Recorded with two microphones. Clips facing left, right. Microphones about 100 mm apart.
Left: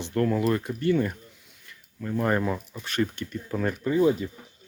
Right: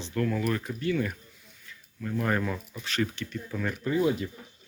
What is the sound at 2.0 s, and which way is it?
Speech, 25° left (ahead or behind).